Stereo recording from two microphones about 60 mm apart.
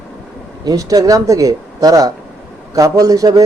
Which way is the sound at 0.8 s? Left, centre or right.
Right.